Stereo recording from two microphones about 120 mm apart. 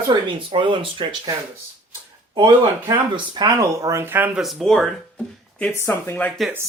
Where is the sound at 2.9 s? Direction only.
35° right (ahead or behind); by 4.4 s 15° right (ahead or behind).